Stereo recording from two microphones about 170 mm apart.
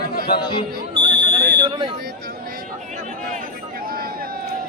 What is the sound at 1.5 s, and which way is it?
Speech, 30° right (ahead or behind).